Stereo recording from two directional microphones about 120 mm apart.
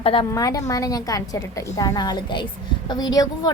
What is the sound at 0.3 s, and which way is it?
A woman's voice, 30° left (ahead or behind).